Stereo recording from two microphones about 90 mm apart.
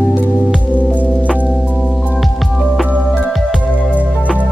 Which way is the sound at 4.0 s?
15° right (ahead or behind).